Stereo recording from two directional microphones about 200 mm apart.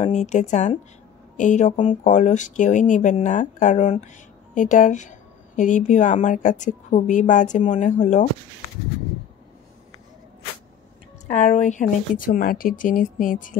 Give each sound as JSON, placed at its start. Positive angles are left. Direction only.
{"t": 0.0, "sound": "speech", "side_deg": 35}
{"t": 11.2, "sound": "speech", "side_deg": 35}